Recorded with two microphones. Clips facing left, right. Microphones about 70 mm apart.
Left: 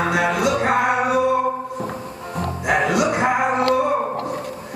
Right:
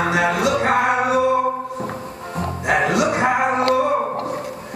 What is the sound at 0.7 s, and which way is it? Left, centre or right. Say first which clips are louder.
Music: right 1 dB; centre.